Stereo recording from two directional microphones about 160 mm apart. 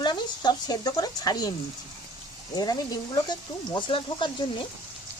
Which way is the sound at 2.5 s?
25° left (ahead or behind).